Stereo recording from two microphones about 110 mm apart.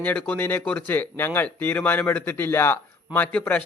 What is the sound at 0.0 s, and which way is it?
A man's voice, 15° left (ahead or behind).